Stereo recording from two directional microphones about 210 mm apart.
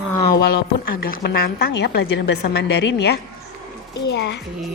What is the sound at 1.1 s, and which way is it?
A woman's voice, 50° left (ahead or behind).